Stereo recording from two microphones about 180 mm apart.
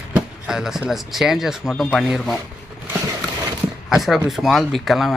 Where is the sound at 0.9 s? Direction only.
Centre (ahead or behind).